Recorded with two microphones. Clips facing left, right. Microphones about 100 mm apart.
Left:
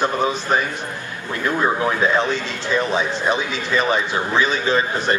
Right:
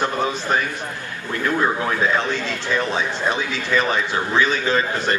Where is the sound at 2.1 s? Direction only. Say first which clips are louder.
Left 2 dB; 20° left (ahead or behind).